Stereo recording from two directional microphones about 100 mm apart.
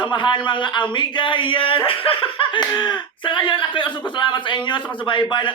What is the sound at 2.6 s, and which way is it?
A man's voice, 45° left (ahead or behind).